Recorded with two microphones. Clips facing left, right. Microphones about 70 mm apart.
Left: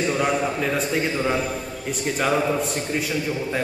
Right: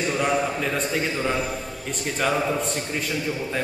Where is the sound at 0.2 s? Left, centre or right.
Centre.